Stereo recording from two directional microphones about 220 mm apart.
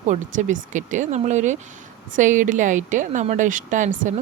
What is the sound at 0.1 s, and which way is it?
Speech, 35° right (ahead or behind).